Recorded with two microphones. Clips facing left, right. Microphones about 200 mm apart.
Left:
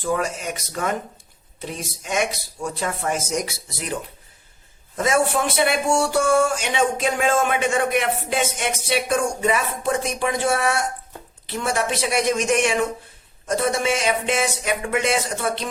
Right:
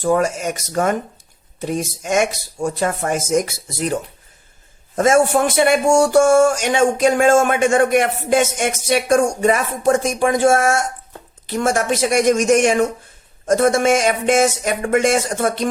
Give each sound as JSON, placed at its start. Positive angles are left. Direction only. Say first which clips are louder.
{"t": 0.0, "sound": "speech", "louder": "right 7 dB", "side_deg": -45}